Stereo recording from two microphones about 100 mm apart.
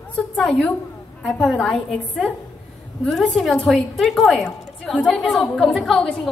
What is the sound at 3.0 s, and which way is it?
A woman's voice, centre (ahead or behind).